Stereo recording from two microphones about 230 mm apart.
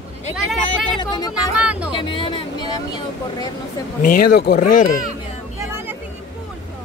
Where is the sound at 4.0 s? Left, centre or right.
Left.